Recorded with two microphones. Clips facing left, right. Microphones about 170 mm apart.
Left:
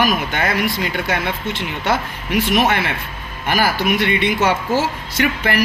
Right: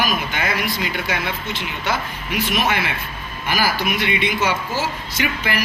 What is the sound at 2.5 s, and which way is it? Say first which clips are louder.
A man's voice: left 3 dB; 55° left (ahead or behind).